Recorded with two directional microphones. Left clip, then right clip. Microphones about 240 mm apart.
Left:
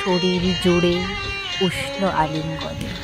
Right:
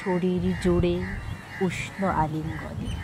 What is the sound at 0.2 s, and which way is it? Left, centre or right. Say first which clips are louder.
A man's voice: left 7 dB; centre.